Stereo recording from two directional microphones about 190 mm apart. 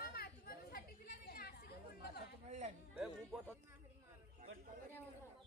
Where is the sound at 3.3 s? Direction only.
Centre (ahead or behind).